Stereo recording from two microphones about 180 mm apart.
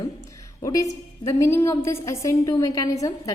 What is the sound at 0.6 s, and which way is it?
A woman's voice, 20° left (ahead or behind).